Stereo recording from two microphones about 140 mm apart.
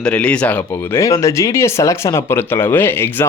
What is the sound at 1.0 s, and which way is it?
Speech, 20° left (ahead or behind).